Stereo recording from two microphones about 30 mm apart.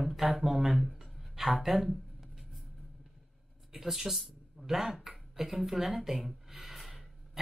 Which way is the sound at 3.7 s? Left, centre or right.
Centre.